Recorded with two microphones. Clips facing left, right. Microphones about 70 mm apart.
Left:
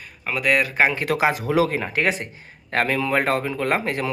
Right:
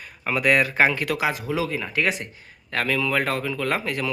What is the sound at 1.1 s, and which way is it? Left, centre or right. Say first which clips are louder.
Speech: left 4 dB; left.